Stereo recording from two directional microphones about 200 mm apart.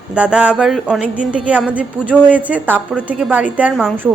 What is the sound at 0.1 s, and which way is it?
A woman's voice, 5° right (ahead or behind).